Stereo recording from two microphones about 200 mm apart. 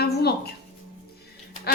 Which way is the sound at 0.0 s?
55° left (ahead or behind).